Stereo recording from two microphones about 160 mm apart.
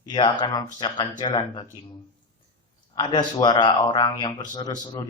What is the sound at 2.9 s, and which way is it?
A man's voice, 25° left (ahead or behind).